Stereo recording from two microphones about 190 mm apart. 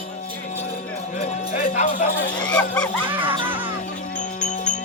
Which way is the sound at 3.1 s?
10° right (ahead or behind).